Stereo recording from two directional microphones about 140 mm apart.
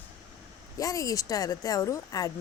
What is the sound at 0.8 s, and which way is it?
Speech, 25° left (ahead or behind).